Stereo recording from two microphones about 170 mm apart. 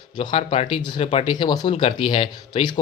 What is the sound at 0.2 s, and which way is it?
A man's voice, 35° left (ahead or behind).